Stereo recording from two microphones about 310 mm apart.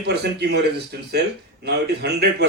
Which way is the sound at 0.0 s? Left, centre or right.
Right.